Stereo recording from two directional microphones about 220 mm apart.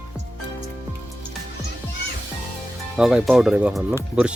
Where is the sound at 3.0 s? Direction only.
Centre (ahead or behind).